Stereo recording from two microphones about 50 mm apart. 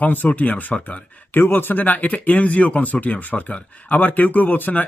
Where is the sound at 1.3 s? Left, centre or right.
Left.